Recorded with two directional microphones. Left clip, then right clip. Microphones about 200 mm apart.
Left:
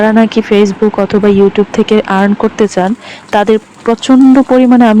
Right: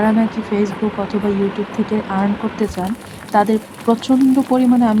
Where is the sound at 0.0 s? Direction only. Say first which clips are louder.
Left 9 dB; 40° left (ahead or behind).